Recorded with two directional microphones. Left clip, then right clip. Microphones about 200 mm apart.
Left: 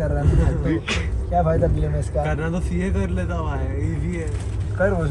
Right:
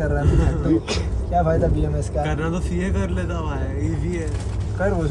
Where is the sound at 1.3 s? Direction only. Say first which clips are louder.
Even; centre (ahead or behind).